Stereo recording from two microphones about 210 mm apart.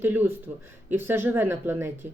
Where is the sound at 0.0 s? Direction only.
10° right (ahead or behind).